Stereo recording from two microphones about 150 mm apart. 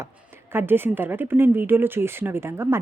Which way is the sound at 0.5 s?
15° right (ahead or behind).